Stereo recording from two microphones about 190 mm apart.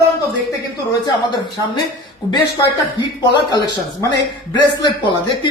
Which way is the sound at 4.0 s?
20° left (ahead or behind).